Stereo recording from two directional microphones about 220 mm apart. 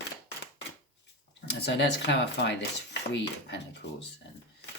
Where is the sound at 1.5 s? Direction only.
50° left (ahead or behind).